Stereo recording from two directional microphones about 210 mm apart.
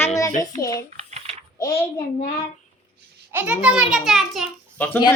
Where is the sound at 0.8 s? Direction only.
30° right (ahead or behind).